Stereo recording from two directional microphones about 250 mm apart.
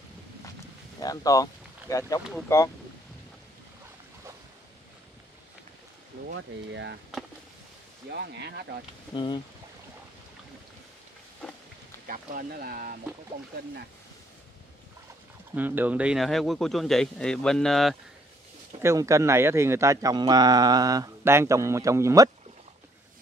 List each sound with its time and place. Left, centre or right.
1.0 s speech: centre
6.3 s speech: right
8.1 s speech: right
9.1 s speech: centre
12.1 s speech: right
15.5 s a man's voice: centre
18.8 s speech: centre